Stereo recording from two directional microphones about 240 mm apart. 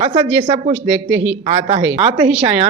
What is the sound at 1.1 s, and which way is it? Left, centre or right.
Speech, right.